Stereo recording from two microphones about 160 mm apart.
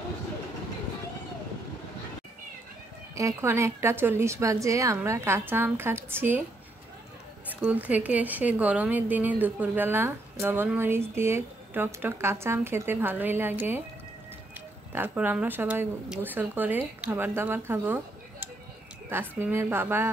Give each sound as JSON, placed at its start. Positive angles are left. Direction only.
{"t": 3.2, "sound": "speech", "side_deg": -15}
{"t": 7.4, "sound": "speech", "side_deg": -10}
{"t": 14.9, "sound": "speech", "side_deg": -10}